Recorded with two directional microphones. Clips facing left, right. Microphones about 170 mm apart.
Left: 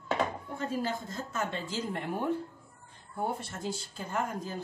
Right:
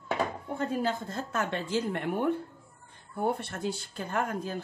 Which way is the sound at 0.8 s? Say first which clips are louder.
Right 3 dB; 65° right (ahead or behind).